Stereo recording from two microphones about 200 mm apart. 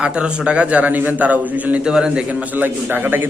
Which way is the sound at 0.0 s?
5° right (ahead or behind).